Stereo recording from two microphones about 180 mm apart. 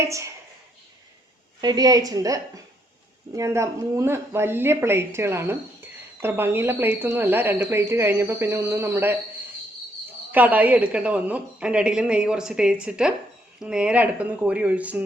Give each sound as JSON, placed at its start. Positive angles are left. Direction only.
{"t": 0.0, "sound": "speech", "side_deg": -15}
{"t": 1.6, "sound": "a woman's voice", "side_deg": -20}
{"t": 10.3, "sound": "a woman's voice", "side_deg": -10}